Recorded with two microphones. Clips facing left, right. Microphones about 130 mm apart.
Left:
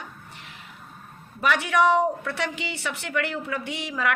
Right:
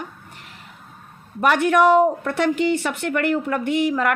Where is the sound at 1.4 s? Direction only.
50° right (ahead or behind).